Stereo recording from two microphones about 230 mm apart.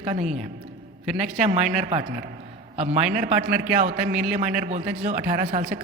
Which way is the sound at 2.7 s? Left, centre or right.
Right.